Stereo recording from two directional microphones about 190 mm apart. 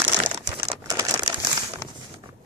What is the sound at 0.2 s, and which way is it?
Crumpling, 25° right (ahead or behind).